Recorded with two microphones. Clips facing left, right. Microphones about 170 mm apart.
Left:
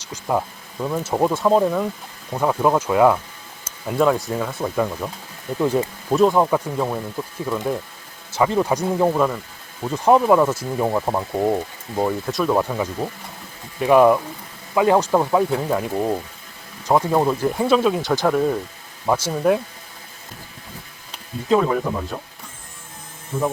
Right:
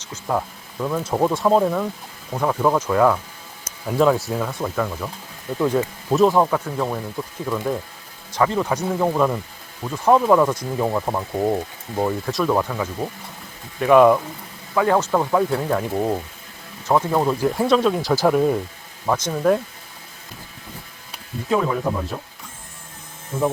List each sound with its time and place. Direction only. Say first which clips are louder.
0.0 s speech: left 1 dB; 10° left (ahead or behind)
3.6 s speech: right 1 dB; centre (ahead or behind)
4.8 s speech: left 2 dB; 10° left (ahead or behind)
6.5 s speech: left 2 dB; 10° left (ahead or behind)
9.8 s speech: left 1 dB; 20° left (ahead or behind); by 16.2 s centre (ahead or behind)
16.8 s speech: left 1 dB; 10° left (ahead or behind); by 18.6 s 5° right (ahead or behind)
19.0 s speech: even; 5° left (ahead or behind)